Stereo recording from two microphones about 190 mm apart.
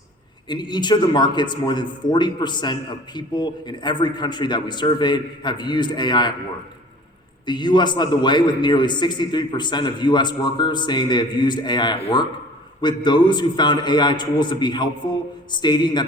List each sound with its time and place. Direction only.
0.4 s a man's voice: 25° left (ahead or behind)
7.4 s a man's voice: 25° left (ahead or behind)